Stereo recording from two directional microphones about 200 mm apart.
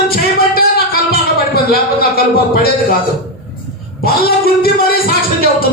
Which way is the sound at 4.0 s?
50° left (ahead or behind).